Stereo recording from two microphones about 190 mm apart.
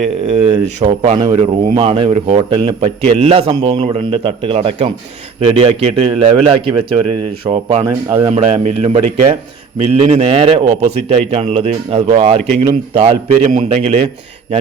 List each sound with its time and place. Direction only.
0.0 s a man's voice: 35° right (ahead or behind)
13.5 s a man's voice: 45° right (ahead or behind)
13.8 s a man's voice: 35° right (ahead or behind)